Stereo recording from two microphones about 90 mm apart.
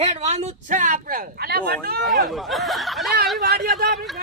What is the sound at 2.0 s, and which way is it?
Speech, centre (ahead or behind).